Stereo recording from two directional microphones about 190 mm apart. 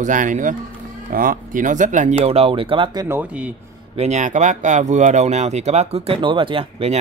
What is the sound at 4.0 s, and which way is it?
Speech, 35° right (ahead or behind).